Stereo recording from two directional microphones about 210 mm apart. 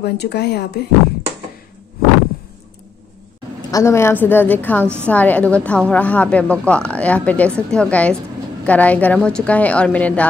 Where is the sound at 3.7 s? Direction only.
15° left (ahead or behind).